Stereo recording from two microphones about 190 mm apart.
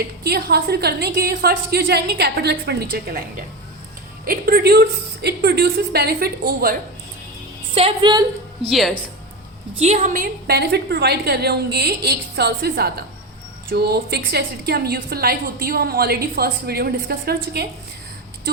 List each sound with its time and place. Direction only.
0.3 s a woman's voice: 55° right (ahead or behind)
7.7 s a woman's voice: 30° right (ahead or behind)
9.7 s a woman's voice: 35° right (ahead or behind); by 17.7 s 60° right (ahead or behind)